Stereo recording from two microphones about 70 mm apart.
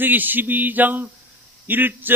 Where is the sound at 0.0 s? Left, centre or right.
Right.